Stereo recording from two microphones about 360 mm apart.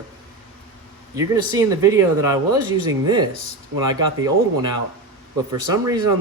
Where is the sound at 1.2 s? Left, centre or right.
Centre.